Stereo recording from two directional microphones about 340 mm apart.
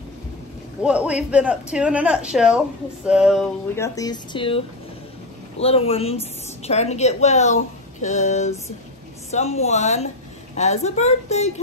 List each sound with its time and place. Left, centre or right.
0.8 s speech: centre
3.1 s a sound: centre
5.6 s a woman's voice: centre